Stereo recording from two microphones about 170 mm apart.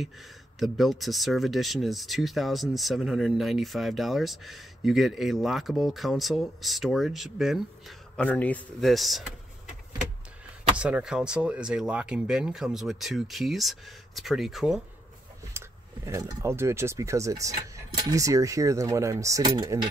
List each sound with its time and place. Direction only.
0.6 s speech: centre (ahead or behind)
8.2 s speech: 10° left (ahead or behind)
10.8 s speech: 5° right (ahead or behind)
16.1 s speech: 15° right (ahead or behind)